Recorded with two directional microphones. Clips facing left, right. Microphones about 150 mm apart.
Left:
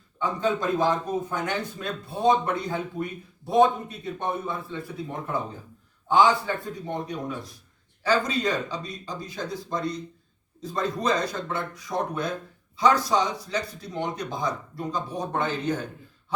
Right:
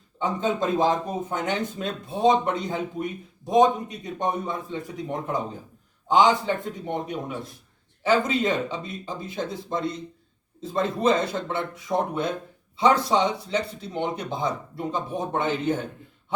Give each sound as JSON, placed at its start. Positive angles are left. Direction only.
{"t": 0.2, "sound": "speech", "side_deg": -20}